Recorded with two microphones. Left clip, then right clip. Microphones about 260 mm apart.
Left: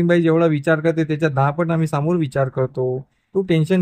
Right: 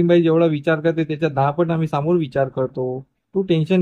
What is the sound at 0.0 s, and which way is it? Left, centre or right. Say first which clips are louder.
A man's voice: right 1 dB; left.